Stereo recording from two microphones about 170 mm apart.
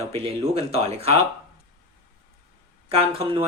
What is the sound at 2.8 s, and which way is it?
Speech, 35° right (ahead or behind).